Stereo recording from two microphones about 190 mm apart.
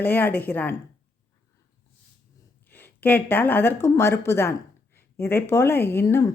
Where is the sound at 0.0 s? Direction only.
10° left (ahead or behind).